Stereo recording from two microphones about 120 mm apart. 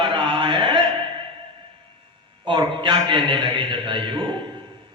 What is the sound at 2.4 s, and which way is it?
A man's voice, 45° right (ahead or behind).